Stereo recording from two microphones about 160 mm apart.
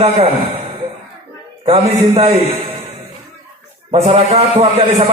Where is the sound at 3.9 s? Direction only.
35° right (ahead or behind).